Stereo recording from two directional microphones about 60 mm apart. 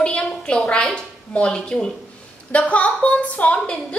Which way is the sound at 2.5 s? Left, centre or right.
Left.